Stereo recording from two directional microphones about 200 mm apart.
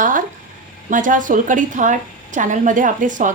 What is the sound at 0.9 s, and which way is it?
A woman's voice, 40° right (ahead or behind).